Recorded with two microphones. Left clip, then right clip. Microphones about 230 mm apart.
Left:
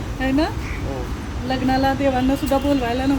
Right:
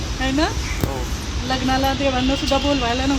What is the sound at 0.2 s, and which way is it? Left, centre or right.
Speech, centre.